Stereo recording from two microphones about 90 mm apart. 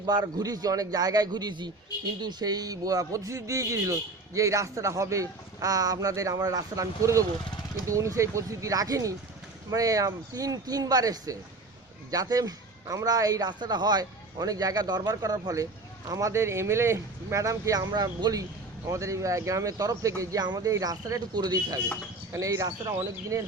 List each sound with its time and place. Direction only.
0.0 s a man's voice: 50° right (ahead or behind)
18.9 s a man's voice: 35° right (ahead or behind)
20.4 s a man's voice: 45° right (ahead or behind)